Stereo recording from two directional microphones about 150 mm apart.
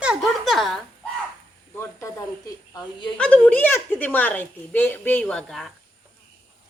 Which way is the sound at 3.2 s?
10° left (ahead or behind).